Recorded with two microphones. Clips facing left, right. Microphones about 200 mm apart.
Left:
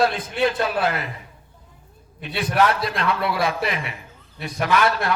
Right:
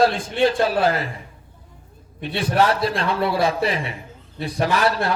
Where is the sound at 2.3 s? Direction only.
30° right (ahead or behind).